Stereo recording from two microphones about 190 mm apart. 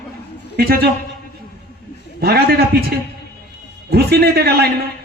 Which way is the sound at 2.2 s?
55° right (ahead or behind).